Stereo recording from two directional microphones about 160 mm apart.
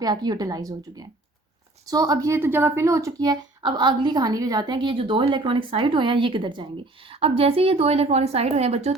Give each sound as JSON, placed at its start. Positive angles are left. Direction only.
{"t": 0.0, "sound": "speech", "side_deg": -25}